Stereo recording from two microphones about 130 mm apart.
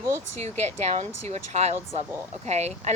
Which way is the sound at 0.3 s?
55° right (ahead or behind).